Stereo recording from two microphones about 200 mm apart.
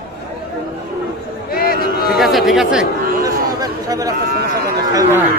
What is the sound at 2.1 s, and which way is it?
Chatter, centre (ahead or behind).